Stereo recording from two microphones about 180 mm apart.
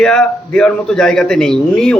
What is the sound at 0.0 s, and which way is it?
A man's voice, 5° left (ahead or behind).